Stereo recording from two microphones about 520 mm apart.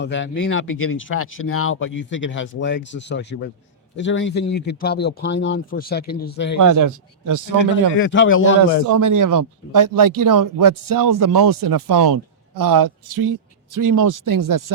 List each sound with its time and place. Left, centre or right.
0.0 s speech: left
6.6 s speech: right
7.9 s speech: left
8.9 s speech: right